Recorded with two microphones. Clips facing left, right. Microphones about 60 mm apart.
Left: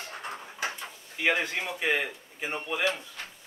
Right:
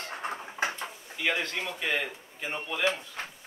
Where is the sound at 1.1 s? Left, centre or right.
Centre.